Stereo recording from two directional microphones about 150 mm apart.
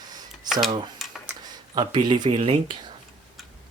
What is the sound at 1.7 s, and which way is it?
Speech, 30° right (ahead or behind).